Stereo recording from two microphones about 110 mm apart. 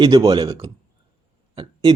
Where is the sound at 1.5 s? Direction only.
45° right (ahead or behind).